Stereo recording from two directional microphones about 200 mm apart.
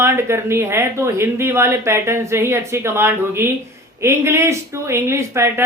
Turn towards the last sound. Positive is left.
turn(degrees=-15)  # may be behind; listen again after turning